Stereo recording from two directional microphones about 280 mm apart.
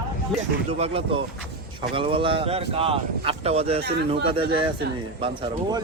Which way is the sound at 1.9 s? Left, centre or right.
Centre.